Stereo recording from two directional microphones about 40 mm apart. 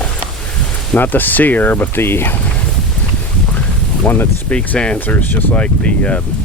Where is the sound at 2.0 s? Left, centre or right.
Left.